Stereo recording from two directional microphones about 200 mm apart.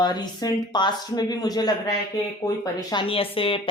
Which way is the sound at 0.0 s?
20° left (ahead or behind).